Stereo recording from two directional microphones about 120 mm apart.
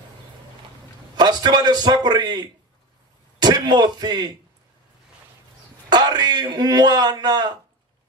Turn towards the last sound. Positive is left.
turn(degrees=-35)  # may be behind; listen again after turning